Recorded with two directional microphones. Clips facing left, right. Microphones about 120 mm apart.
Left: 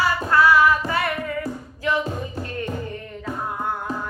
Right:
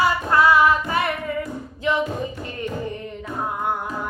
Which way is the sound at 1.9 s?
20° right (ahead or behind).